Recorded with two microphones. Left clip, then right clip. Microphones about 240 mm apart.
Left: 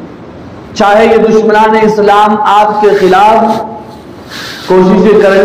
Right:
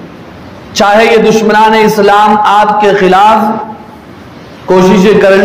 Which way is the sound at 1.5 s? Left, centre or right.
Right.